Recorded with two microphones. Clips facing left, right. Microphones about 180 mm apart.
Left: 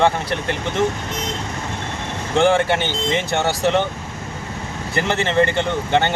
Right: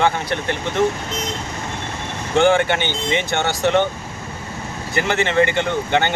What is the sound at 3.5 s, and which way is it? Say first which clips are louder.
Speech: even; centre (ahead or behind).